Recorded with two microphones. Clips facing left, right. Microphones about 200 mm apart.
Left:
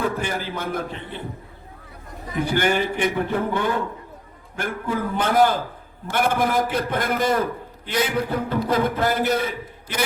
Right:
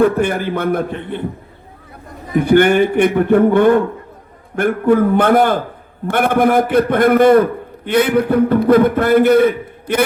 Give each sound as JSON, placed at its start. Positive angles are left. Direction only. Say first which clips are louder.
{"t": 0.0, "sound": "a man's voice", "louder": "right 11 dB", "side_deg": -55}
{"t": 2.3, "sound": "a man's voice", "louder": "right 10 dB", "side_deg": -55}